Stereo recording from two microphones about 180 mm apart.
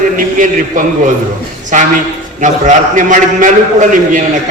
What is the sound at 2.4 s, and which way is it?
A man's voice, 45° right (ahead or behind).